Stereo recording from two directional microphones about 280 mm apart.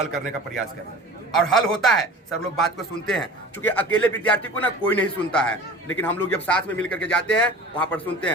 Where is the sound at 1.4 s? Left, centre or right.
Centre.